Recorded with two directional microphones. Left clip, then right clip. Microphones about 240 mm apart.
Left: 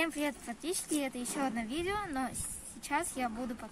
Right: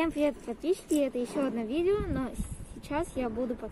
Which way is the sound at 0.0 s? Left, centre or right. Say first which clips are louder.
Right 5 dB; left.